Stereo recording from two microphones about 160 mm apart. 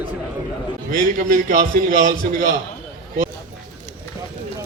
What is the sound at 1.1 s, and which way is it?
A man's voice, 55° right (ahead or behind).